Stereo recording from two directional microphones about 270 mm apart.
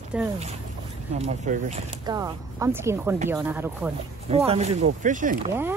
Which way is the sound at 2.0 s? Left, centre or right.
Centre.